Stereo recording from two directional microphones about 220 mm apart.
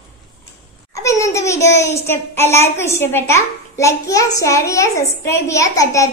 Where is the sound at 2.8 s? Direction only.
10° left (ahead or behind).